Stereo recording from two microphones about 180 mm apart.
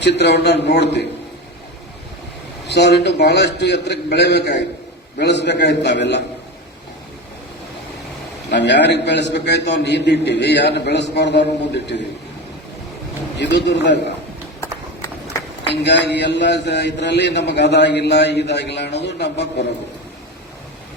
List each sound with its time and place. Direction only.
0.0 s a man's voice: 70° left (ahead or behind)
2.6 s a man's voice: 70° left (ahead or behind)
8.4 s a man's voice: 70° left (ahead or behind)
13.4 s a man's voice: 75° left (ahead or behind)
14.6 s horse: 15° left (ahead or behind)
15.7 s a man's voice: 70° left (ahead or behind)